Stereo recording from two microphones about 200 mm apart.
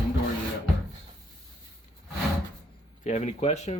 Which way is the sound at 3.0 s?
35° left (ahead or behind).